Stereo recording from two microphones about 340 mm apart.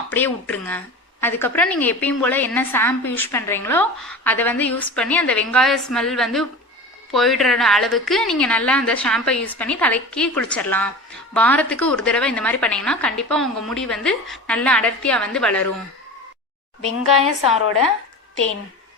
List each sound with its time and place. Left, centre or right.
0.1 s a woman's voice: centre
17.0 s a woman's voice: left